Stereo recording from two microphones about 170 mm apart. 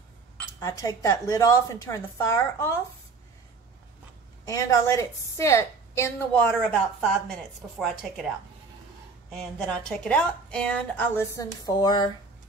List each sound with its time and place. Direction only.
0.6 s a woman's voice: 20° left (ahead or behind)
4.5 s speech: 20° left (ahead or behind)
9.3 s speech: centre (ahead or behind); by 12.1 s 25° left (ahead or behind)